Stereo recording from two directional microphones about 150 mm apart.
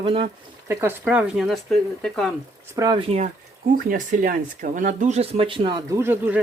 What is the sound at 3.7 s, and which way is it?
Speech, 65° right (ahead or behind).